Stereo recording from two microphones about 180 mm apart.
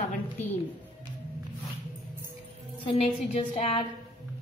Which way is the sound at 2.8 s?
30° left (ahead or behind).